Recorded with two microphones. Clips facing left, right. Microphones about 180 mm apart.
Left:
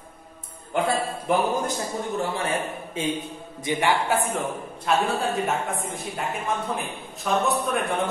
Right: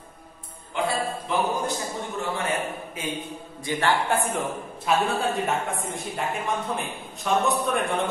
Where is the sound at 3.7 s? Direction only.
10° left (ahead or behind).